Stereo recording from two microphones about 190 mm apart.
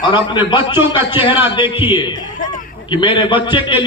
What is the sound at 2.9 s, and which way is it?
Speech, 25° left (ahead or behind).